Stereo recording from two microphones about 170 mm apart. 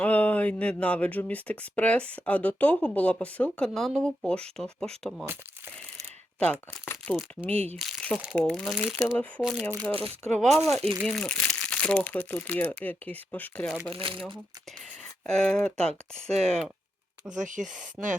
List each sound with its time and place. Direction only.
0.0 s speech: 10° left (ahead or behind)
5.2 s speech: 15° right (ahead or behind)
6.4 s speech: 5° left (ahead or behind)
13.9 s speech: 30° right (ahead or behind)
15.3 s speech: 5° left (ahead or behind)
16.3 s speech: 40° right (ahead or behind)
18.0 s speech: 5° right (ahead or behind)